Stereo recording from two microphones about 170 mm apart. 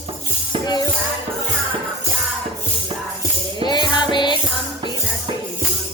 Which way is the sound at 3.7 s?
25° left (ahead or behind).